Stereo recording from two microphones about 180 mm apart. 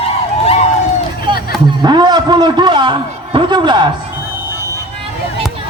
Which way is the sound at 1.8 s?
25° right (ahead or behind).